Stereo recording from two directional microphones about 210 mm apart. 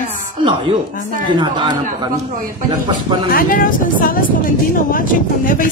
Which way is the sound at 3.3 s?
40° left (ahead or behind).